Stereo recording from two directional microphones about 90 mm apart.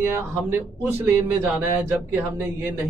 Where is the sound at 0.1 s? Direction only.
25° right (ahead or behind).